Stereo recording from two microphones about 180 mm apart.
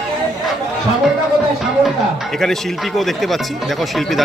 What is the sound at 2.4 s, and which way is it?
Speech, centre (ahead or behind).